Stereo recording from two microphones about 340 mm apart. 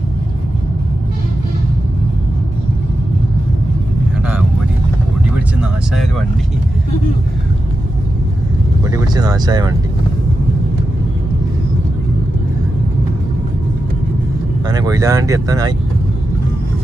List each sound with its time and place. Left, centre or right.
5.5 s music: centre
8.9 s a sound: centre
14.7 s speech: centre